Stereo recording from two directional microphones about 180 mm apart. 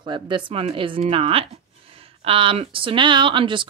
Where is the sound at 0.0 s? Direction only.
25° right (ahead or behind).